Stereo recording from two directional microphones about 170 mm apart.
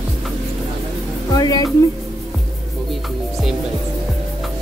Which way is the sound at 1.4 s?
20° left (ahead or behind).